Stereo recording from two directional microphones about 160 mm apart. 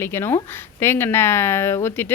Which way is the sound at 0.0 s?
15° left (ahead or behind).